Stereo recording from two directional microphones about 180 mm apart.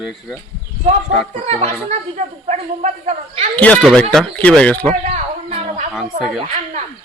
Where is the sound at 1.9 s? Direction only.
40° right (ahead or behind).